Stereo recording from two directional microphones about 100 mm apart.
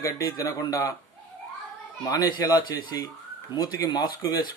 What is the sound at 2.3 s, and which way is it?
A man's voice, 40° left (ahead or behind).